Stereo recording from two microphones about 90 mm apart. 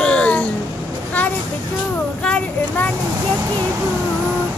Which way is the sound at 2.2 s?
15° left (ahead or behind).